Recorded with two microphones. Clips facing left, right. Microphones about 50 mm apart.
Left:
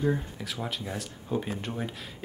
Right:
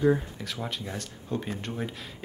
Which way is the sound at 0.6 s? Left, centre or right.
Centre.